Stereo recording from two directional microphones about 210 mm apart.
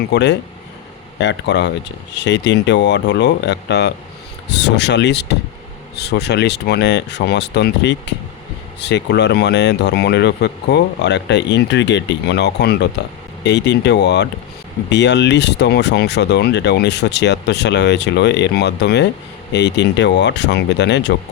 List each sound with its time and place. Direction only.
0.1 s speech: 55° left (ahead or behind)